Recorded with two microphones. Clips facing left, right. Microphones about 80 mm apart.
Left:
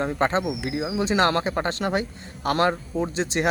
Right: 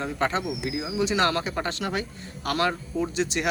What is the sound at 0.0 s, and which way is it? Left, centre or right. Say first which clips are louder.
Speech: left 4 dB; left.